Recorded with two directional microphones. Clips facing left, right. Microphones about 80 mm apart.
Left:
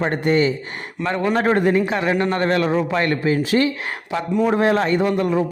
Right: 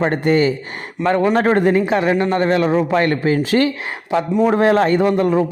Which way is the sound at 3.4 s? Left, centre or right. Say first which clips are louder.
Right 2 dB; right.